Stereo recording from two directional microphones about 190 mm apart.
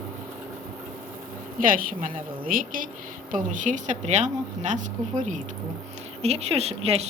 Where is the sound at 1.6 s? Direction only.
45° right (ahead or behind).